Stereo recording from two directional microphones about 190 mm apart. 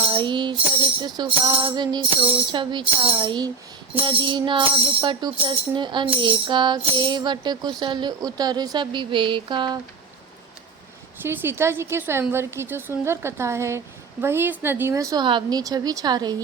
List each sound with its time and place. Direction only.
0.1 s tambourine: 25° right (ahead or behind)
1.0 s music: 20° right (ahead or behind)
11.2 s a woman's voice: 10° right (ahead or behind)